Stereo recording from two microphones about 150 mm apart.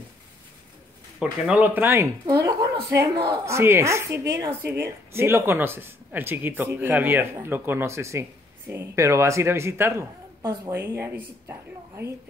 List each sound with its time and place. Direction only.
1.2 s speech: 10° right (ahead or behind)